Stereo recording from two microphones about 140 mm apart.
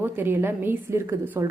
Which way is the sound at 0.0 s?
15° right (ahead or behind).